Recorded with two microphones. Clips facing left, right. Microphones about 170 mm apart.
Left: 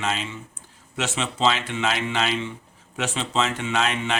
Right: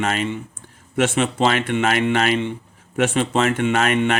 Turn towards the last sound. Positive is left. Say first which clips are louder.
# right 7 dB
turn(degrees=-55)  # may be behind; listen again after turning